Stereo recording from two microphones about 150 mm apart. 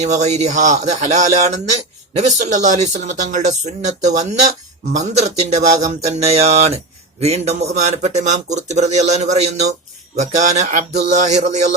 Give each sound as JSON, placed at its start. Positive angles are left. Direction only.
{"t": 0.0, "sound": "speech", "side_deg": -50}